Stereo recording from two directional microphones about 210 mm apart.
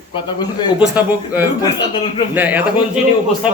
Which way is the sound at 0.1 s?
20° left (ahead or behind).